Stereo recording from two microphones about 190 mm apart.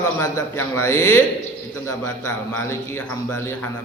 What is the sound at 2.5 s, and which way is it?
A man's voice, 15° left (ahead or behind).